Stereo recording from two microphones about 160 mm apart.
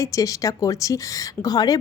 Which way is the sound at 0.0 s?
20° left (ahead or behind).